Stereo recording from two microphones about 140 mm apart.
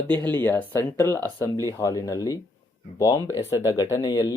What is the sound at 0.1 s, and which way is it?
Speech, 10° left (ahead or behind).